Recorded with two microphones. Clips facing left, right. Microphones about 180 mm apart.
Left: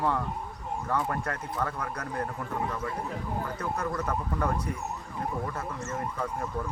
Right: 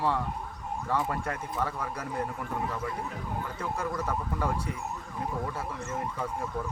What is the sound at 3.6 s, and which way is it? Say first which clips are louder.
Speech: right 1 dB; 10° right (ahead or behind).